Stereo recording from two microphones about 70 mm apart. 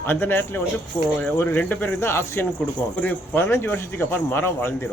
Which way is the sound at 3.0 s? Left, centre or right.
Left.